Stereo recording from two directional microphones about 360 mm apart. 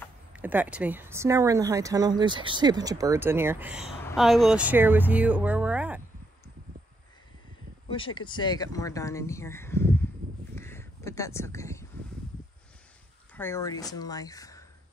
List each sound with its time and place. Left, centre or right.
0.0 s speech: centre
7.9 s speech: centre
10.5 s a sound: centre
13.3 s speech: centre